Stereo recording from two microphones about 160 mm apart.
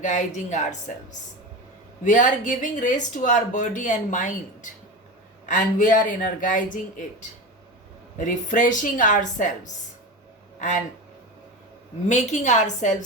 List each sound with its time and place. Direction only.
0.3 s speech: 50° left (ahead or behind)
2.0 s speech: 50° left (ahead or behind)
10.6 s speech: 50° left (ahead or behind)
12.0 s speech: 50° left (ahead or behind)